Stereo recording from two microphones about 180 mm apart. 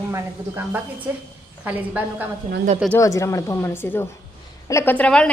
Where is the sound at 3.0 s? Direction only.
15° left (ahead or behind).